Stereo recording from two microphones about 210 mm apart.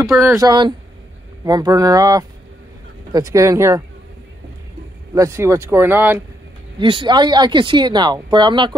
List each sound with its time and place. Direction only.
0.2 s speech: 15° right (ahead or behind)
5.1 s speech: 15° right (ahead or behind)
6.8 s speech: 25° right (ahead or behind)